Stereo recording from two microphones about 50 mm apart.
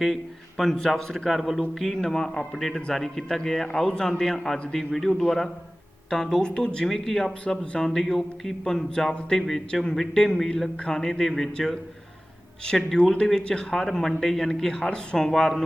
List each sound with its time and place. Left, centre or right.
0.0 s a man's voice: centre
6.8 s speech: centre